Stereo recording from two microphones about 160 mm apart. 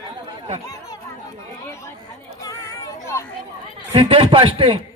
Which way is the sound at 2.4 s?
20° left (ahead or behind).